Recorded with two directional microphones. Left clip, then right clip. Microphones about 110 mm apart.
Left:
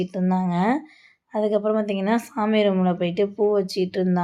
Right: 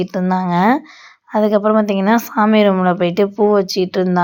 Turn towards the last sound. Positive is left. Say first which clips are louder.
# right 7 dB
turn(degrees=-30)  # may be behind; listen again after turning